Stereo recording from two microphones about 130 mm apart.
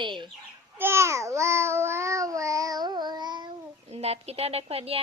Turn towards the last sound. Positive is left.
turn(degrees=-50)  # may be behind; listen again after turning